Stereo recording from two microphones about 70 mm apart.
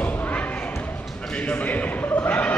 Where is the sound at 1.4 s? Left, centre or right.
Left.